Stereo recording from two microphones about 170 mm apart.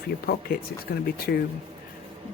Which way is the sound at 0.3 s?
65° left (ahead or behind).